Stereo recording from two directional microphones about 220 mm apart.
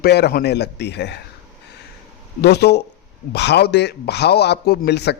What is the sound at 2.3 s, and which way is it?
A man's voice, 50° left (ahead or behind).